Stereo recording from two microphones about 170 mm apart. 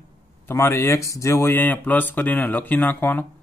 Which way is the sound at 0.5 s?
15° left (ahead or behind).